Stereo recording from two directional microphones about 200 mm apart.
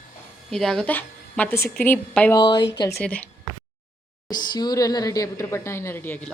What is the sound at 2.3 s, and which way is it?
Speech, 25° left (ahead or behind).